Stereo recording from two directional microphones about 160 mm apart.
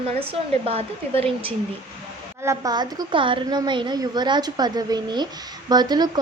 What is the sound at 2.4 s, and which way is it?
A woman's voice, 20° right (ahead or behind).